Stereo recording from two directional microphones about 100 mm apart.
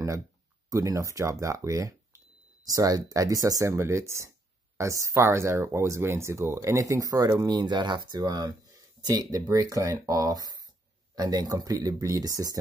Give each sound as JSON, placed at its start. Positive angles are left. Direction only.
{"t": 0.7, "sound": "speech", "side_deg": -35}